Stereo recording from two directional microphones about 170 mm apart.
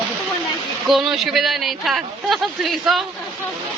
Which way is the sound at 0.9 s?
Centre (ahead or behind).